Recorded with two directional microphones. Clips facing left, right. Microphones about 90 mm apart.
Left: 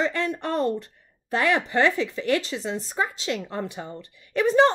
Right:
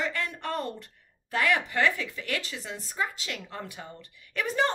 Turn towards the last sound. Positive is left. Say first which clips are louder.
# left 9 dB
turn(degrees=30)  # may be behind; listen again after turning